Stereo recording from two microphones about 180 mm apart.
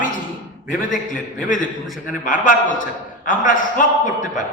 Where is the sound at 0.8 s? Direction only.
45° left (ahead or behind).